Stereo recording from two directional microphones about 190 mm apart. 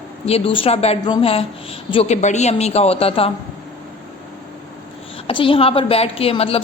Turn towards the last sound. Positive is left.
turn(degrees=30)  # may be behind; listen again after turning